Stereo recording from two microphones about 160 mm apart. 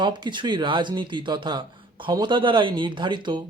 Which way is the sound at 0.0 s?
30° right (ahead or behind).